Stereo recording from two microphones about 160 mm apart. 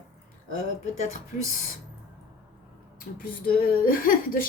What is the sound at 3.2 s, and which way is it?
Speech, 70° left (ahead or behind).